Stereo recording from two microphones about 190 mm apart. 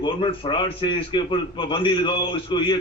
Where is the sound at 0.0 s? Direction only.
25° left (ahead or behind).